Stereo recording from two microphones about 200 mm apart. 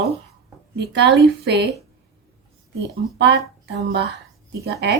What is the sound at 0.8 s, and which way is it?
Speech, 60° right (ahead or behind).